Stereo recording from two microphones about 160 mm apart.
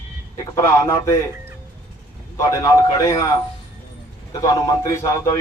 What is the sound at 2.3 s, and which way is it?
Speech, 20° left (ahead or behind).